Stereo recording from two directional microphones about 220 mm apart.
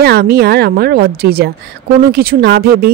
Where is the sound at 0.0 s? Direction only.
45° right (ahead or behind).